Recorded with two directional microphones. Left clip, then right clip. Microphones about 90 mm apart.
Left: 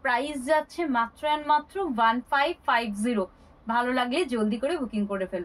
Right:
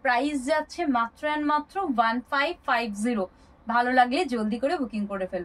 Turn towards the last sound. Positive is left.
turn(degrees=30)  # may be behind; listen again after turning